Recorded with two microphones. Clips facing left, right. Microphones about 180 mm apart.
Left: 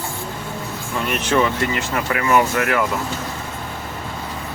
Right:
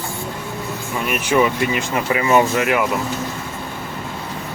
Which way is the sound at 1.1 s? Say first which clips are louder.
Right 2 dB; 10° right (ahead or behind).